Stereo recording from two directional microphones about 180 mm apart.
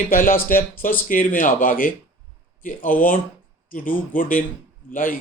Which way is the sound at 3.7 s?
50° left (ahead or behind).